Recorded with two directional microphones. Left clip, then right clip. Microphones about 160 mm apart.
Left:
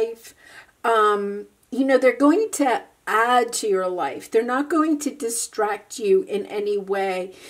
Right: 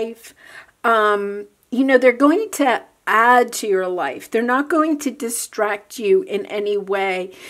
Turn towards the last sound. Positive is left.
turn(degrees=-30)  # may be behind; listen again after turning